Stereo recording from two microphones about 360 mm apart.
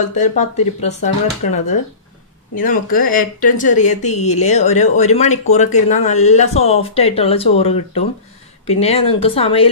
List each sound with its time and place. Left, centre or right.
0.0 s speech: centre